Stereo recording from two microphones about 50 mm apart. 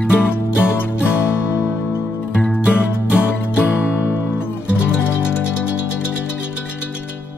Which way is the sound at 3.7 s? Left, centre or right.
Left.